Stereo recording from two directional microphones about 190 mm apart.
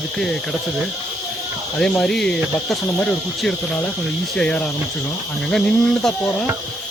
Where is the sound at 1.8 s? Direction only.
Centre (ahead or behind).